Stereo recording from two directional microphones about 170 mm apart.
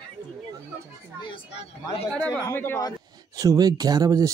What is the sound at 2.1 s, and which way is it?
Speech, 5° left (ahead or behind).